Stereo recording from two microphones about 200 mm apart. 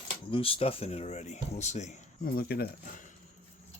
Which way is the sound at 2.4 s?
50° left (ahead or behind).